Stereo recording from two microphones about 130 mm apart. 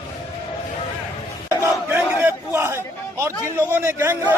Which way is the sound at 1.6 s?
15° right (ahead or behind).